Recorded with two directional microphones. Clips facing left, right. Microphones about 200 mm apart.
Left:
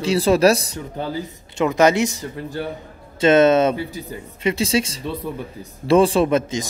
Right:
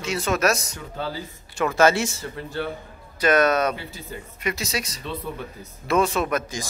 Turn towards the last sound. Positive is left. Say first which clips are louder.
# left 7 dB
turn(degrees=25)  # may be behind; listen again after turning